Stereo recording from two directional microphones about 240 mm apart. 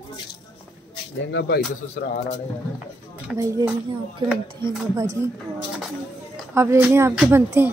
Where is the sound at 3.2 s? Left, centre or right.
Centre.